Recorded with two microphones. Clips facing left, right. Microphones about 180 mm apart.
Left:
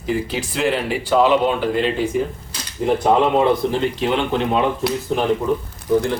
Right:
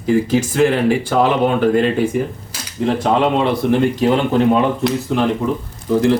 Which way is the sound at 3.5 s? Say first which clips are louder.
Right 3 dB; 60° right (ahead or behind).